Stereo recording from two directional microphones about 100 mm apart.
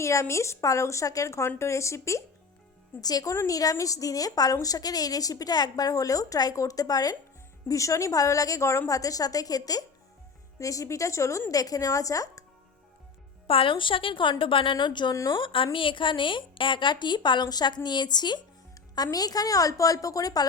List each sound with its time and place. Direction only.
0.0 s a woman's voice: 30° left (ahead or behind)
13.5 s a woman's voice: 60° left (ahead or behind); by 20.4 s 35° left (ahead or behind)